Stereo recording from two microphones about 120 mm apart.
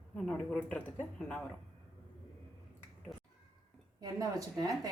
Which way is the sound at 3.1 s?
Centre (ahead or behind).